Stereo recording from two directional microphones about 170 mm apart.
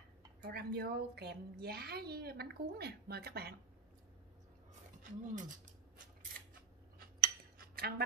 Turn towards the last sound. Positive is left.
turn(degrees=-60)  # may be behind; listen again after turning